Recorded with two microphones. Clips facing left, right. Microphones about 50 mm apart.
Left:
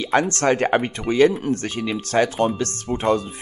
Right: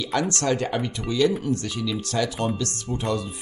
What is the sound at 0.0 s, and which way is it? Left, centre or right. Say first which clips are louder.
Speech: left 5 dB; left.